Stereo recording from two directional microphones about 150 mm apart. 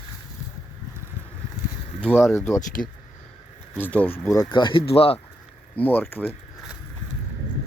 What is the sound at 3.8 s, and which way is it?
Speech, 10° left (ahead or behind).